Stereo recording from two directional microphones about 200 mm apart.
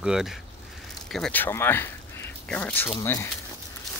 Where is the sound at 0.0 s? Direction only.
Centre (ahead or behind); by 3.3 s 15° left (ahead or behind).